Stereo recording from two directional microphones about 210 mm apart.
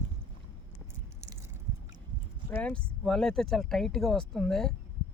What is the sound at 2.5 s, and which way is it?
A man's voice, 5° left (ahead or behind).